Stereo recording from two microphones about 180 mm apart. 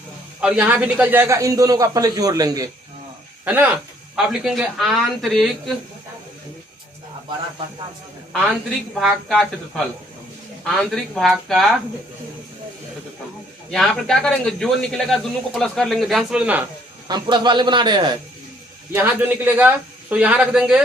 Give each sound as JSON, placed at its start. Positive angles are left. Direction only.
{"t": 0.4, "sound": "a man's voice", "side_deg": -10}
{"t": 3.4, "sound": "speech", "side_deg": -10}
{"t": 8.3, "sound": "a woman's voice", "side_deg": 0}
{"t": 13.7, "sound": "speech", "side_deg": 5}
{"t": 17.1, "sound": "a man's voice", "side_deg": -25}
{"t": 18.9, "sound": "speech", "side_deg": -10}